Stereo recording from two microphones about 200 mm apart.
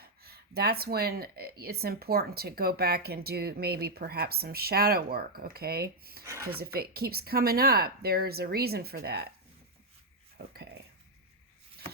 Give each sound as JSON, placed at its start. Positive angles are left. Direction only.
{"t": 0.0, "sound": "speech", "side_deg": -50}
{"t": 6.2, "sound": "speech", "side_deg": -15}
{"t": 6.7, "sound": "speech", "side_deg": -50}
{"t": 10.3, "sound": "speech", "side_deg": -50}